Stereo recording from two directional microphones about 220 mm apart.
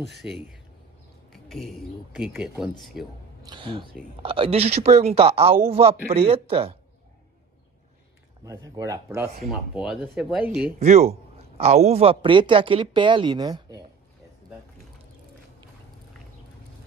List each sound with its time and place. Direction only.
0.0 s speech: centre (ahead or behind)
3.4 s a man's voice: 20° right (ahead or behind)
8.5 s speech: 15° right (ahead or behind)
9.5 s speech: centre (ahead or behind)
10.8 s a man's voice: 30° right (ahead or behind)